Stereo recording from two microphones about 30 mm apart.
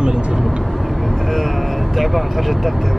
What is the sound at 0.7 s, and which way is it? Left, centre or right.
Vehicle, centre.